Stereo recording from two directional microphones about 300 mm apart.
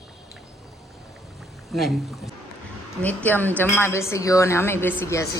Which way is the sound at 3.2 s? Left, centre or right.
Centre.